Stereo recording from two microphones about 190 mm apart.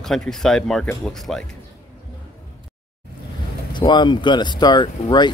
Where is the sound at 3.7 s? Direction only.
25° left (ahead or behind).